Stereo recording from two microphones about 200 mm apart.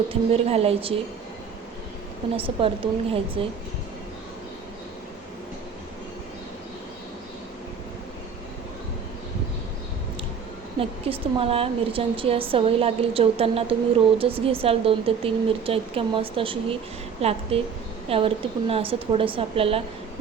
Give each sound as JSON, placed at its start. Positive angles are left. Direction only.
{"t": 0.1, "sound": "a woman's voice", "side_deg": -30}
{"t": 2.3, "sound": "a woman's voice", "side_deg": -25}
{"t": 10.8, "sound": "a woman's voice", "side_deg": -25}